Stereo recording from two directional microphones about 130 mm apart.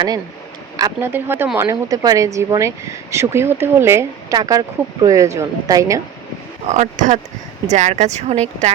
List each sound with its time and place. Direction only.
0.8 s speech: 30° right (ahead or behind)
1.1 s speech: 15° right (ahead or behind)
6.7 s speech: 70° right (ahead or behind)